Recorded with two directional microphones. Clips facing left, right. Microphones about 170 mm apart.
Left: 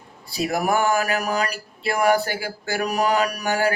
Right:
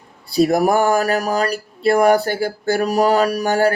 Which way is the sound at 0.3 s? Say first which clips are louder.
Right 7 dB; 40° right (ahead or behind).